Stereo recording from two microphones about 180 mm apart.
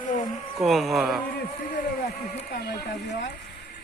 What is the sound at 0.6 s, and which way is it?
Speech, centre (ahead or behind).